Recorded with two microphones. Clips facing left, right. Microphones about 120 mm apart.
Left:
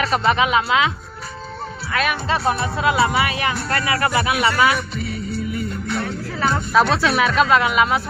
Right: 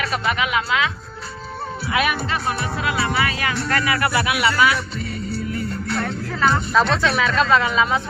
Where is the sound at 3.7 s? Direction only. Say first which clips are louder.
Even; 30° left (ahead or behind).